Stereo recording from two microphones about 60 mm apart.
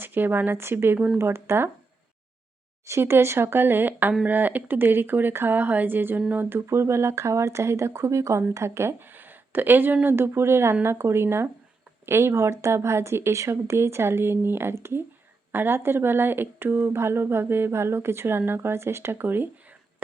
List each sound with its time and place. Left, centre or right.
0.0 s speech: right
0.9 s speech: centre
1.2 s speech: right
3.0 s speech: right
6.7 s speech: right